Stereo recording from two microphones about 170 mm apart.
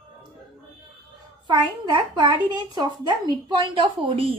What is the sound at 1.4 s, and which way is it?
A woman's voice, 25° right (ahead or behind).